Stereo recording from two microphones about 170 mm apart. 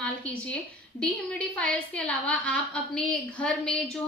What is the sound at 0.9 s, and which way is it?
A woman's voice, 5° left (ahead or behind).